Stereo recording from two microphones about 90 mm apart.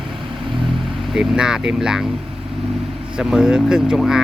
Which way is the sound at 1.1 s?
5° right (ahead or behind).